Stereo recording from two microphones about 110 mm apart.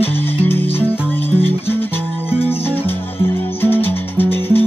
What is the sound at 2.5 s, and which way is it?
Music, 20° left (ahead or behind).